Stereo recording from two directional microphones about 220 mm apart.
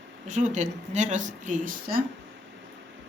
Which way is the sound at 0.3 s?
35° right (ahead or behind).